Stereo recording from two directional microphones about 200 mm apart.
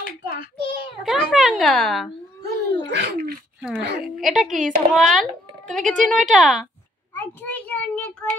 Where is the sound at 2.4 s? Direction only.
60° right (ahead or behind).